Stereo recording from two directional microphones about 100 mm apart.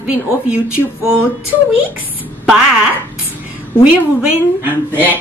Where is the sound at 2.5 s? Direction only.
10° right (ahead or behind).